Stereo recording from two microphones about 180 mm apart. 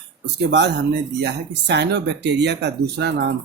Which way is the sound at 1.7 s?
70° right (ahead or behind).